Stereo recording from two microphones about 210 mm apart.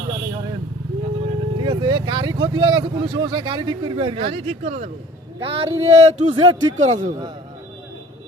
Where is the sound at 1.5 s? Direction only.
20° right (ahead or behind).